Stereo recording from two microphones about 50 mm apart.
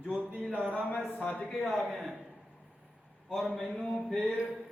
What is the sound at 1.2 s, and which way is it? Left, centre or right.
Speech, left.